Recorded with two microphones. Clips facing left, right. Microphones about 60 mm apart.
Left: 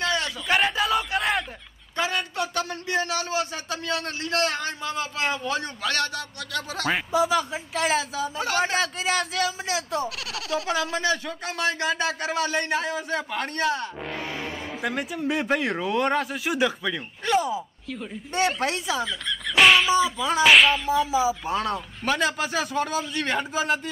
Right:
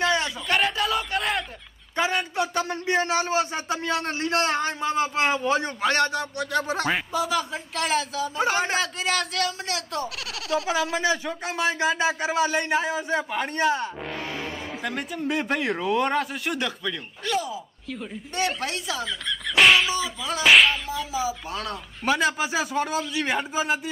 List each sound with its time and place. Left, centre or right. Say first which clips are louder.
0.0 s a sound: right 3 dB; centre
0.5 s a sound: left 2 dB; centre
2.0 s speech: right 2 dB; right
2.3 s a man's voice: right 2 dB; centre
2.6 s a man's voice: right 3 dB; right
5.3 s a man's voice: right 4 dB; right
6.9 s speech: left 7 dB; centre
11.0 s speech: right 1 dB; centre
18.3 s speech: left 3 dB; centre
18.9 s speech: left 2 dB; centre
20.9 s speech: left 6 dB; centre
22.0 s a man's voice: right 2 dB; centre